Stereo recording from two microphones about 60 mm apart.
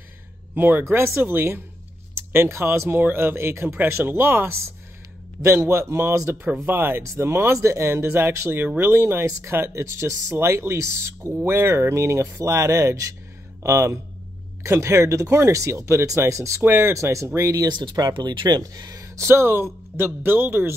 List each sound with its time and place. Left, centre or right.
0.6 s speech: right
0.8 s speech: right
16.6 s speech: right
16.9 s speech: right
18.0 s speech: right
19.2 s speech: right